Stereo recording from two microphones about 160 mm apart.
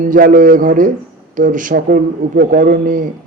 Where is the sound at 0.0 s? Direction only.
55° right (ahead or behind).